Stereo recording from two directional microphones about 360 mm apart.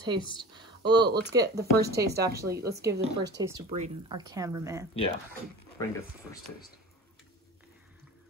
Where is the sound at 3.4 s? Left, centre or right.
Centre.